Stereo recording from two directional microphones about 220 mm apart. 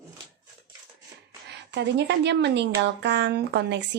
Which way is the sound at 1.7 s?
50° right (ahead or behind).